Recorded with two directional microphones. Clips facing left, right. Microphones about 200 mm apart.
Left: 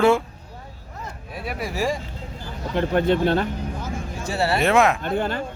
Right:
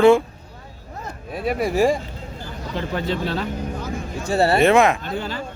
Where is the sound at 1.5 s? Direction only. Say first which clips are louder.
Right 7 dB; 55° right (ahead or behind).